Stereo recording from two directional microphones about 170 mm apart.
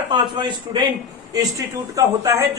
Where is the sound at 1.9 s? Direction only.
20° right (ahead or behind).